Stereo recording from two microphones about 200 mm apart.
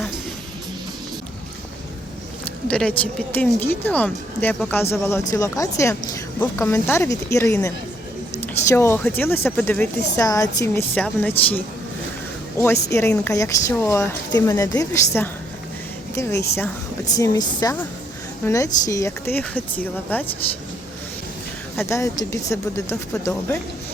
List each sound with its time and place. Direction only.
2.4 s a woman's voice: 5° left (ahead or behind)
17.2 s a woman's voice: 20° left (ahead or behind)
21.8 s a woman's voice: 15° left (ahead or behind)